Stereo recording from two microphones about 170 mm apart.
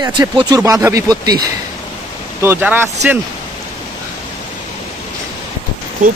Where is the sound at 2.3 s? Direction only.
10° right (ahead or behind).